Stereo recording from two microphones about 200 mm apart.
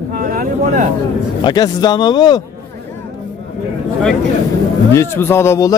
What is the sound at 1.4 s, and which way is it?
Speech, 20° left (ahead or behind).